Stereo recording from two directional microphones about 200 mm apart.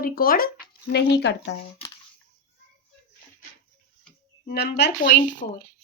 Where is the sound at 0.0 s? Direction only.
45° left (ahead or behind).